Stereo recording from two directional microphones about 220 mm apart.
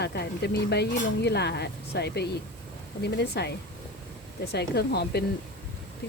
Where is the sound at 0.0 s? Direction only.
45° left (ahead or behind).